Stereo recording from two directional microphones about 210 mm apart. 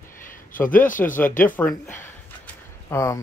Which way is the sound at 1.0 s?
5° left (ahead or behind).